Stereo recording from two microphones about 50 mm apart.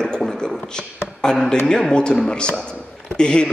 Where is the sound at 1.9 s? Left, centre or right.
Centre.